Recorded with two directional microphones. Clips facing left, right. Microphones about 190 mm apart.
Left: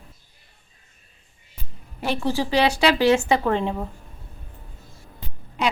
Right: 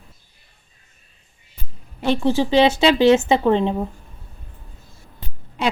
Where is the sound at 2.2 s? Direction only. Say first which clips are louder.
Right 5 dB; 20° right (ahead or behind).